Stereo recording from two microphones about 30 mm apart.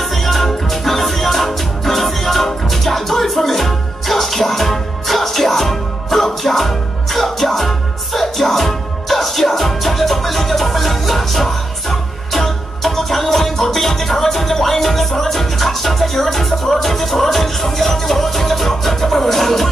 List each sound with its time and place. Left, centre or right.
0.0 s music: centre